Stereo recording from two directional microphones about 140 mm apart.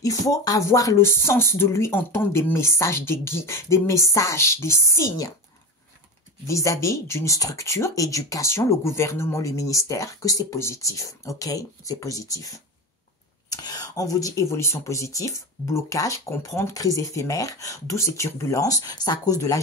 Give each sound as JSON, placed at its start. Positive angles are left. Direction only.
{"t": 0.0, "sound": "speech", "side_deg": 25}
{"t": 6.4, "sound": "speech", "side_deg": 20}